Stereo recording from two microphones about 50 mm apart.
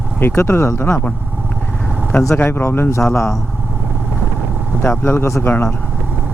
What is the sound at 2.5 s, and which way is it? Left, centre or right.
Speech, left.